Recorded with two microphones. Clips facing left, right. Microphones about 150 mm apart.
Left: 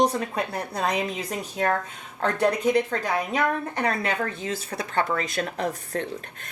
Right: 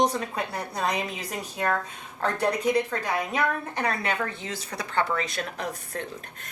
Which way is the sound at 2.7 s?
30° left (ahead or behind).